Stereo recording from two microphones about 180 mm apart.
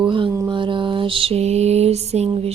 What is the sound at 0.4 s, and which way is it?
Mantra, 25° right (ahead or behind).